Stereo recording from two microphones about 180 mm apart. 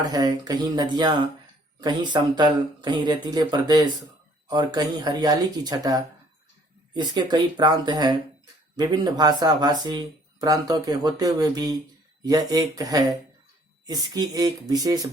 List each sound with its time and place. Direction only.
0.0 s speech: 20° right (ahead or behind)